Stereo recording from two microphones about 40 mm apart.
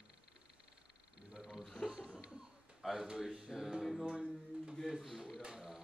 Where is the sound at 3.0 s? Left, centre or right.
Centre.